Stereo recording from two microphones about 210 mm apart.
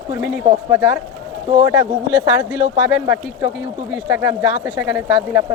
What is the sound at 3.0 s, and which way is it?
Speech, 5° right (ahead or behind).